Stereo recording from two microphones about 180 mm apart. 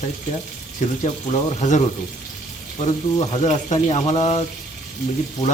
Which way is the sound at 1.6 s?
35° left (ahead or behind).